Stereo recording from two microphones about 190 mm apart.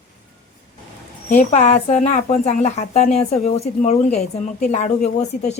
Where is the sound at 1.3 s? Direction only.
40° left (ahead or behind).